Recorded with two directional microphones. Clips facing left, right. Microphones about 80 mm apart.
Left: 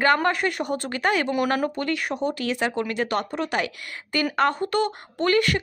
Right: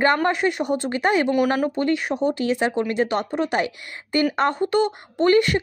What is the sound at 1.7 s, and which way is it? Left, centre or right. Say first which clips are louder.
Speech: right 4 dB; right.